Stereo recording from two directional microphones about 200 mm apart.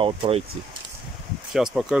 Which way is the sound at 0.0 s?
25° right (ahead or behind).